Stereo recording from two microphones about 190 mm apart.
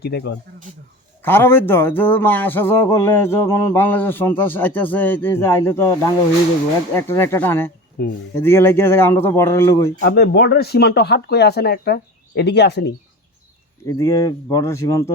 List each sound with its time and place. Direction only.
0.0 s speech: 60° left (ahead or behind)
1.2 s a man's voice: 10° left (ahead or behind)
10.0 s speech: 60° left (ahead or behind)
13.8 s a man's voice: 15° left (ahead or behind)